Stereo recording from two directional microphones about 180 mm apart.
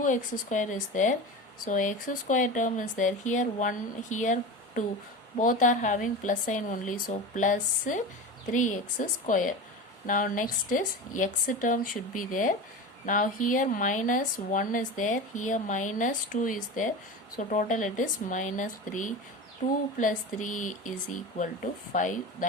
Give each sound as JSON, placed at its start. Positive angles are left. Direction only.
{"t": 0.0, "sound": "speech", "side_deg": 45}
{"t": 21.9, "sound": "speech", "side_deg": 45}